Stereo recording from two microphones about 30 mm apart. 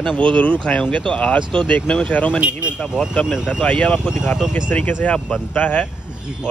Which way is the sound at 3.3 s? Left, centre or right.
Centre.